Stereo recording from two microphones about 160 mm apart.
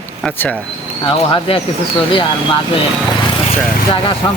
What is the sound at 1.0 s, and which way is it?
Speech, 35° left (ahead or behind).